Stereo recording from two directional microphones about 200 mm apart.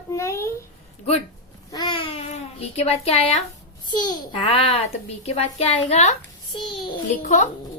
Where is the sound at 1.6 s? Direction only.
20° left (ahead or behind).